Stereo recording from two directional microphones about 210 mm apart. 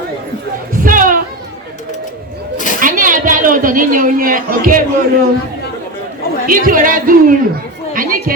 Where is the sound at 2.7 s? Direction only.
40° right (ahead or behind).